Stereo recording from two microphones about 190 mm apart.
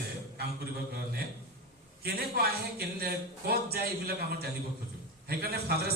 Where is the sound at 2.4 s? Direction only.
50° right (ahead or behind).